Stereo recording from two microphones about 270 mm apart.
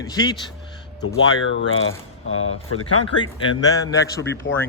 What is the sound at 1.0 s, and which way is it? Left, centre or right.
Speech, left.